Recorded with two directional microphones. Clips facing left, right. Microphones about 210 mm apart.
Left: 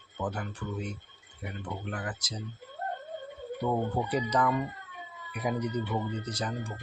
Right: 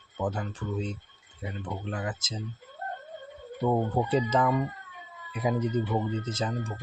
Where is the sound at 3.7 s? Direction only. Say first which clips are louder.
Right 4 dB; 25° right (ahead or behind).